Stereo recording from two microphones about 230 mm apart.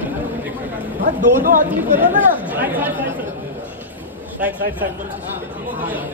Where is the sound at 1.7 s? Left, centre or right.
Centre.